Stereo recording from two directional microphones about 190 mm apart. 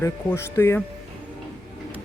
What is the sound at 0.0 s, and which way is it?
Speech, 15° left (ahead or behind).